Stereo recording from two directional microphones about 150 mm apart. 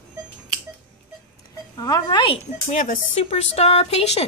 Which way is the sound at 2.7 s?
55° left (ahead or behind).